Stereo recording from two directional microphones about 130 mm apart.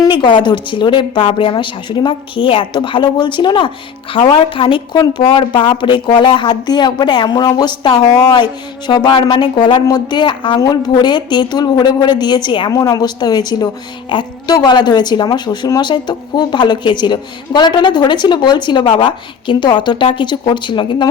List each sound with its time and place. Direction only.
0.0 s a woman's voice: 35° left (ahead or behind)
12.7 s a woman's voice: 25° left (ahead or behind)